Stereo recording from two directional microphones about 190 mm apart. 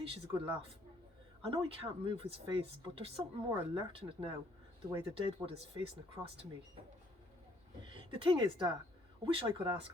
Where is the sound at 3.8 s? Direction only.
25° right (ahead or behind).